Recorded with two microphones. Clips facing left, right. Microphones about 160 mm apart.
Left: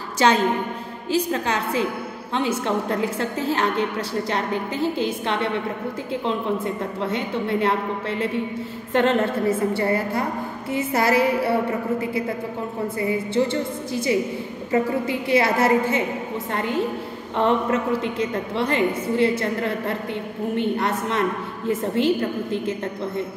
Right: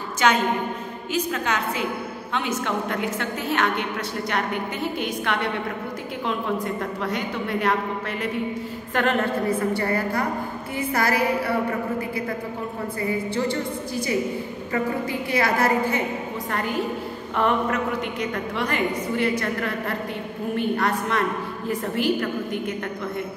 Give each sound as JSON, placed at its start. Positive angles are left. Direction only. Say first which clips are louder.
{"t": 0.2, "sound": "a woman's voice", "louder": "left 2 dB", "side_deg": 30}
{"t": 8.9, "sound": "a woman's voice", "louder": "left 3 dB", "side_deg": 25}
{"t": 13.0, "sound": "a woman's voice", "louder": "left 3 dB", "side_deg": 25}